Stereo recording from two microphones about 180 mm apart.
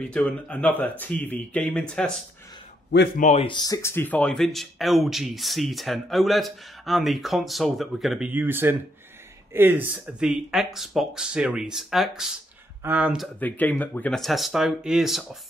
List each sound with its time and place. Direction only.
0.0 s speech: 5° left (ahead or behind)
3.2 s speech: 40° left (ahead or behind)
3.4 s speech: 20° left (ahead or behind); by 8.3 s centre (ahead or behind)
8.3 s speech: 10° right (ahead or behind)
13.4 s speech: 10° left (ahead or behind)